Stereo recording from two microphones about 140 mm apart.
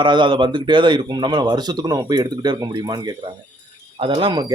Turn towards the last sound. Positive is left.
turn(degrees=-35)  # may be behind; listen again after turning